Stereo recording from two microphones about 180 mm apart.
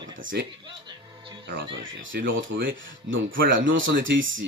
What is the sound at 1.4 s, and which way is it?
Speech, 70° right (ahead or behind).